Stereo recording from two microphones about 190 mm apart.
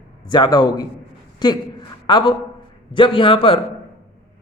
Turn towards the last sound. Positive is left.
turn(degrees=30)  # may be behind; listen again after turning